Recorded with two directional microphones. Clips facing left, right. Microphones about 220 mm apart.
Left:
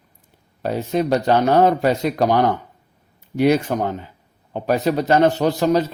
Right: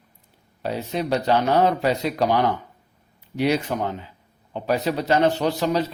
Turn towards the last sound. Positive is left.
turn(degrees=45)  # may be behind; listen again after turning